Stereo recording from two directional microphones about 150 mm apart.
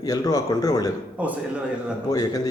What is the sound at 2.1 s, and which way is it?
Speech, 25° left (ahead or behind).